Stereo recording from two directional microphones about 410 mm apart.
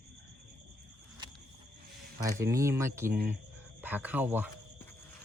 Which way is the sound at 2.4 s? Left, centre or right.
Centre.